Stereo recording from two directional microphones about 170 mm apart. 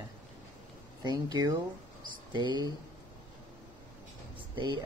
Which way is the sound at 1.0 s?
25° right (ahead or behind).